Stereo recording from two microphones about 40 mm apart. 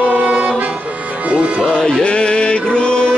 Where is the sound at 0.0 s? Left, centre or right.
Right.